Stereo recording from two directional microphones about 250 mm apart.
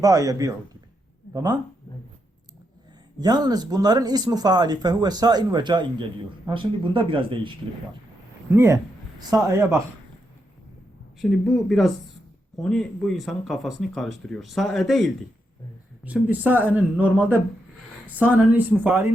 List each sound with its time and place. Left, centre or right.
0.0 s speech: centre
3.2 s speech: centre
8.5 s a man's voice: centre
11.2 s speech: centre